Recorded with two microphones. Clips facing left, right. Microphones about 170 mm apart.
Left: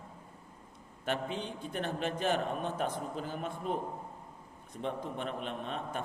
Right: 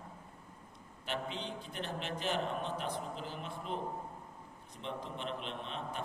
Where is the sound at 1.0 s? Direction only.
50° left (ahead or behind).